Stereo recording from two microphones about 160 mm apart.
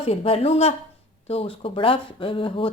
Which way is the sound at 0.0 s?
35° left (ahead or behind).